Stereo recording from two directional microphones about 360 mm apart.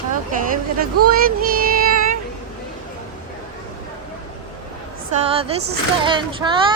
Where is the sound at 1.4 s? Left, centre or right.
Right.